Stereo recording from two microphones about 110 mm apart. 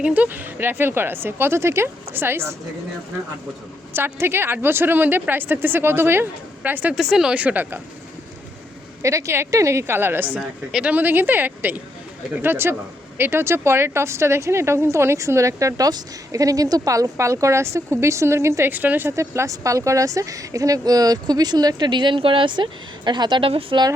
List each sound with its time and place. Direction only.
0.0 s a woman's voice: 15° right (ahead or behind)
3.9 s a woman's voice: 20° right (ahead or behind)
6.9 s speech: 5° right (ahead or behind)
9.0 s a woman's voice: 25° right (ahead or behind)
10.7 s speech: 5° right (ahead or behind)
10.9 s a woman's voice: 15° right (ahead or behind); by 23.8 s 55° right (ahead or behind)